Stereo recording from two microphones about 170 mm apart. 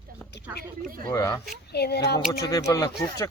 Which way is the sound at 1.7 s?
70° left (ahead or behind).